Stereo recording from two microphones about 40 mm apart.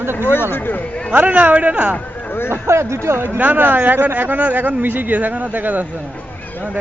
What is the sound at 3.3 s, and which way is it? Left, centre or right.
Speech, right.